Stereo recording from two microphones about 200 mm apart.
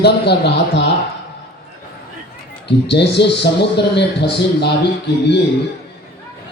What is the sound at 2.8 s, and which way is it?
Speech, 60° left (ahead or behind).